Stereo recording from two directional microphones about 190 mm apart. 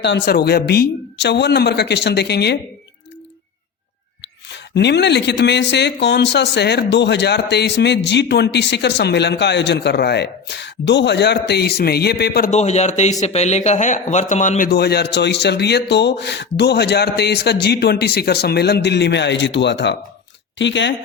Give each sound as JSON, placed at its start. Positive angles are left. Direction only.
{"t": 0.0, "sound": "speech", "side_deg": 60}
{"t": 4.5, "sound": "speech", "side_deg": 65}
{"t": 12.5, "sound": "speech", "side_deg": 35}